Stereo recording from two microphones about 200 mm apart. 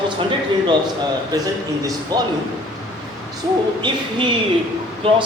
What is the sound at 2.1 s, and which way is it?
Speech, 20° right (ahead or behind).